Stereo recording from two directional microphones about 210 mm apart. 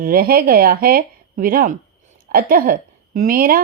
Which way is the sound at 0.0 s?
45° right (ahead or behind).